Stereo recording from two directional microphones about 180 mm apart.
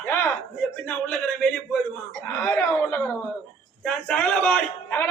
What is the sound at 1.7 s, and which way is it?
A woman's voice, 10° left (ahead or behind).